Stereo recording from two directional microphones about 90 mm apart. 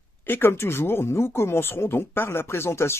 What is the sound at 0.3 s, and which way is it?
Speech, 25° left (ahead or behind).